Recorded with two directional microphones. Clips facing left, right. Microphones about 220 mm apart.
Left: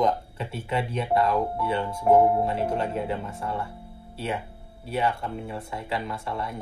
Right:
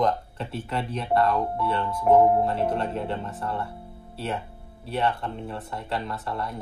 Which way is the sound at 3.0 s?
5° left (ahead or behind).